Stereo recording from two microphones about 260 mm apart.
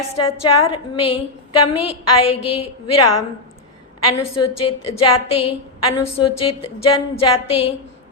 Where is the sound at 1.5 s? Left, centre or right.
Left.